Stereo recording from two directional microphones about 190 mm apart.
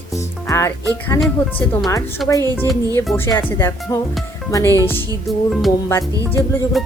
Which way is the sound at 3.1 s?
10° left (ahead or behind).